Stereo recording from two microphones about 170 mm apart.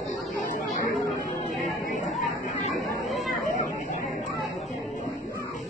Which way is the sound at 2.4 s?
40° left (ahead or behind).